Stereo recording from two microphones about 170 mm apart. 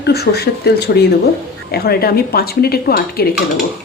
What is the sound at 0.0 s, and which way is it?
A woman's voice, 75° left (ahead or behind).